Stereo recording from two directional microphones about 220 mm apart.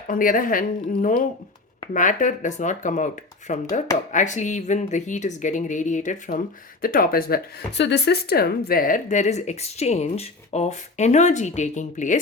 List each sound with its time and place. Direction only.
0.1 s speech: 40° left (ahead or behind)